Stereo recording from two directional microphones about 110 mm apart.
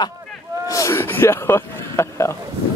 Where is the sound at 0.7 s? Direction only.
30° left (ahead or behind).